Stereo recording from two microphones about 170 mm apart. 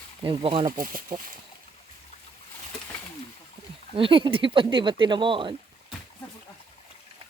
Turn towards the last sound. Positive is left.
turn(degrees=-30)  # may be behind; listen again after turning